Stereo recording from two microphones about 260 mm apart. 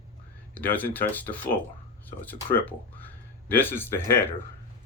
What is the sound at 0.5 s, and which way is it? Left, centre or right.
Speech, centre.